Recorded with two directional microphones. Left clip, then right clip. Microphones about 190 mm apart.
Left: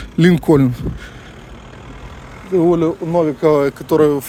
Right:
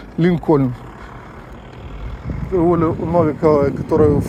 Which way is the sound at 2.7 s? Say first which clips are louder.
Left 1 dB; 35° left (ahead or behind).